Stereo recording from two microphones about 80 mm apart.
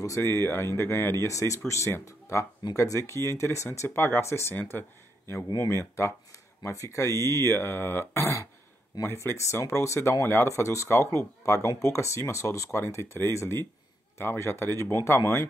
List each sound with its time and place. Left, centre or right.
0.0 s speech: left